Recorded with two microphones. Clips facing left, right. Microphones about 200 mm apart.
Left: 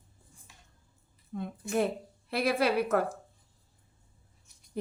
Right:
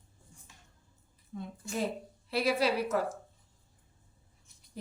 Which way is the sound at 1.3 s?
60° left (ahead or behind).